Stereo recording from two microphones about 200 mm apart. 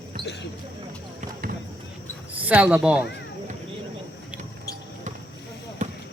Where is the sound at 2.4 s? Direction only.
5° right (ahead or behind).